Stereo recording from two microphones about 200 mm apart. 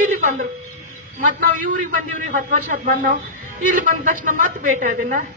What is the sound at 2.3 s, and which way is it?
A woman's voice, 40° right (ahead or behind).